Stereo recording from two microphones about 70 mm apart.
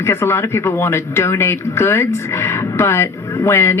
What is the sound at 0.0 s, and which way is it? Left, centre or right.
Speech, left.